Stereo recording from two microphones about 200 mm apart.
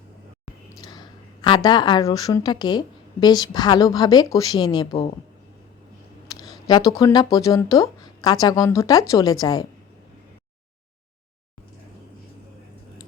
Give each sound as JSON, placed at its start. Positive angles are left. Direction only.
{"t": 0.8, "sound": "a woman's voice", "side_deg": 20}
{"t": 6.4, "sound": "speech", "side_deg": 20}